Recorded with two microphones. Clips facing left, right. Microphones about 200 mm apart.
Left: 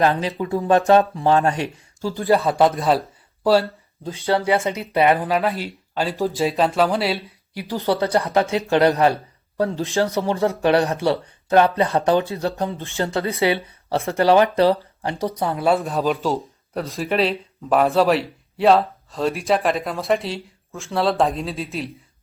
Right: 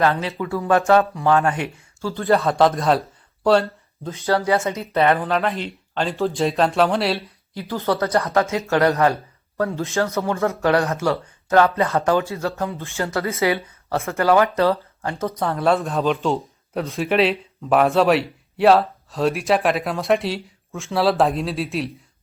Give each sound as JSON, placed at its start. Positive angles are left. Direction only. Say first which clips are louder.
{"t": 0.0, "sound": "speech", "louder": "left 1 dB", "side_deg": 15}
{"t": 2.0, "sound": "speech", "louder": "left 1 dB", "side_deg": 15}
{"t": 2.2, "sound": "speech", "louder": "even", "side_deg": 0}
{"t": 4.3, "sound": "speech", "louder": "even", "side_deg": 25}
{"t": 4.9, "sound": "speech", "louder": "left 1 dB", "side_deg": 10}
{"t": 7.6, "sound": "speech", "louder": "left 1 dB", "side_deg": 15}
{"t": 7.9, "sound": "speech", "louder": "left 1 dB", "side_deg": 30}
{"t": 8.7, "sound": "speech", "louder": "left 1 dB", "side_deg": 20}
{"t": 10.2, "sound": "speech", "louder": "left 1 dB", "side_deg": 30}
{"t": 10.8, "sound": "speech", "louder": "left 1 dB", "side_deg": 15}
{"t": 13.2, "sound": "speech", "louder": "left 1 dB", "side_deg": 30}